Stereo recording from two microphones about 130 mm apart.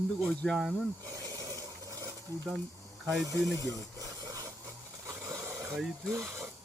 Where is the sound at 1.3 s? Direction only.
25° right (ahead or behind).